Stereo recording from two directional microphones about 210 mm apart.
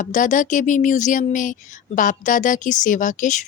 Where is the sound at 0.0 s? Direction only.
35° left (ahead or behind).